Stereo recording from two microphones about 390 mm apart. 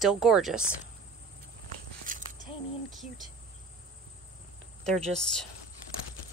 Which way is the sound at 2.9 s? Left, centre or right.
Centre.